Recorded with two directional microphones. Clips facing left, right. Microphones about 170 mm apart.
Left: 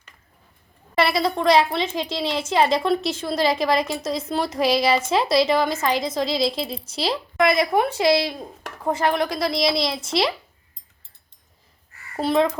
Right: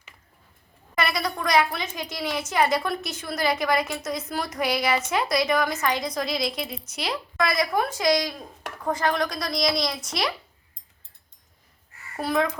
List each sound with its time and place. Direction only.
0.9 s speech: 30° left (ahead or behind)
12.1 s speech: 25° left (ahead or behind)